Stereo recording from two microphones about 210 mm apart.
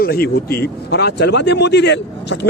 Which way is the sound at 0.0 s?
45° left (ahead or behind).